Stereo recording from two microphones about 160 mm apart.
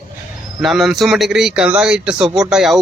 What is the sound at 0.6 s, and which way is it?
Speech, centre (ahead or behind).